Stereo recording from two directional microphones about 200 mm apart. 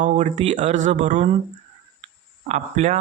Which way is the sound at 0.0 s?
40° right (ahead or behind).